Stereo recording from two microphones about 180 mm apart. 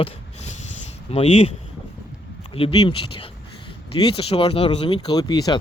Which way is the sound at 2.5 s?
30° left (ahead or behind).